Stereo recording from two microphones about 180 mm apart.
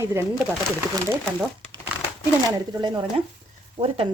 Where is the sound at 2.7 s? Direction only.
25° right (ahead or behind).